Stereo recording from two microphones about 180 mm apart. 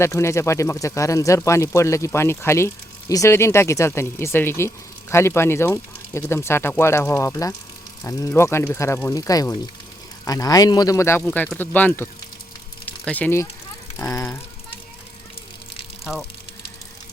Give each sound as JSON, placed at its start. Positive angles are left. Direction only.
{"t": 0.0, "sound": "a man's voice", "side_deg": 15}
{"t": 11.2, "sound": "a man's voice", "side_deg": 5}